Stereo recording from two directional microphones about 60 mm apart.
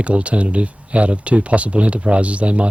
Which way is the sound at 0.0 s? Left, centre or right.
Right.